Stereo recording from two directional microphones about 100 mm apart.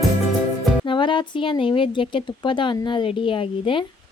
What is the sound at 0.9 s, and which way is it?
Speech, 55° left (ahead or behind).